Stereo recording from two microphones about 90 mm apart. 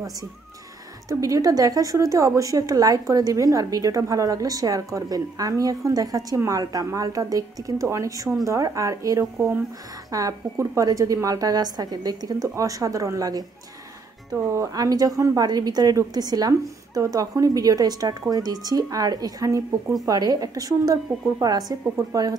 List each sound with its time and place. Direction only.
1.0 s a woman's voice: 40° right (ahead or behind)